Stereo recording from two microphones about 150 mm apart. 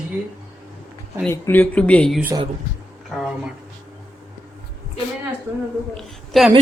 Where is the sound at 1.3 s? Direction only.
15° left (ahead or behind).